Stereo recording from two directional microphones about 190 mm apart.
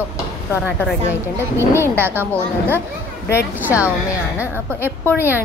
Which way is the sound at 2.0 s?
10° right (ahead or behind).